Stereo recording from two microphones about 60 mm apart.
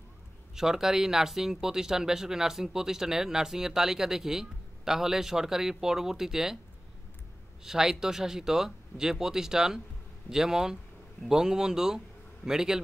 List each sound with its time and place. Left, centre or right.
0.6 s speech: centre
7.6 s speech: centre